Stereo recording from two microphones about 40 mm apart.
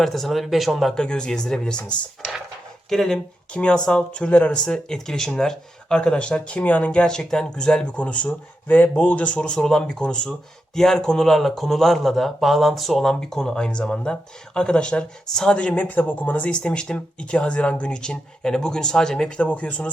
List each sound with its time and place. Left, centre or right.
0.0 s speech: centre
0.9 s speech: left
1.5 s speech: left
2.9 s speech: centre
3.5 s speech: left
7.0 s speech: centre
7.9 s speech: left
9.3 s speech: left; by 13.1 s centre
13.1 s speech: centre
15.7 s speech: left
16.9 s speech: left
19.3 s speech: left